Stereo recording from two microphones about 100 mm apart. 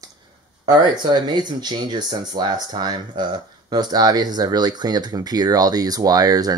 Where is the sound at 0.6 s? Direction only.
45° right (ahead or behind).